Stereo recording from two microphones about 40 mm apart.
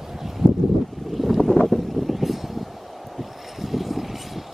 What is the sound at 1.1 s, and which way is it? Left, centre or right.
Boat, centre.